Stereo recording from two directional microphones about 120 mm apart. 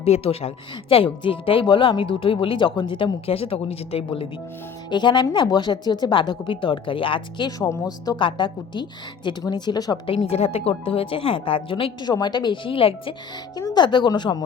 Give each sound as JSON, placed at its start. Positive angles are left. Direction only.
{"t": 0.0, "sound": "speech", "side_deg": 55}
{"t": 4.9, "sound": "speech", "side_deg": 40}
{"t": 7.7, "sound": "speech", "side_deg": 30}
{"t": 10.2, "sound": "speech", "side_deg": 60}
{"t": 12.0, "sound": "speech", "side_deg": 35}
{"t": 13.6, "sound": "speech", "side_deg": 35}